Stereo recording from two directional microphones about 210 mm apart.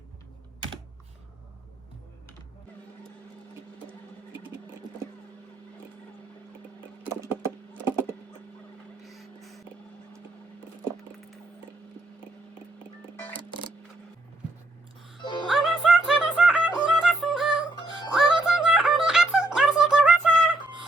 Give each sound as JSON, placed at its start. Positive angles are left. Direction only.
{"t": 9.0, "sound": "a sound", "side_deg": 0}
{"t": 13.3, "sound": "music", "side_deg": -20}
{"t": 15.2, "sound": "music", "side_deg": 20}
{"t": 15.4, "sound": "music", "side_deg": 0}